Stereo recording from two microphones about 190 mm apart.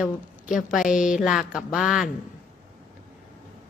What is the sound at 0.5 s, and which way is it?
A woman's voice, centre (ahead or behind).